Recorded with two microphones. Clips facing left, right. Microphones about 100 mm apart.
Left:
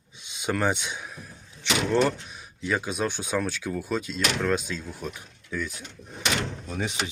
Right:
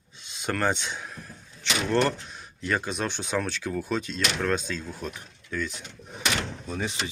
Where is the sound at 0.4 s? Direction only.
15° left (ahead or behind).